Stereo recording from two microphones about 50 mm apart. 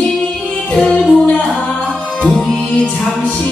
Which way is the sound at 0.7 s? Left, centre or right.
Centre.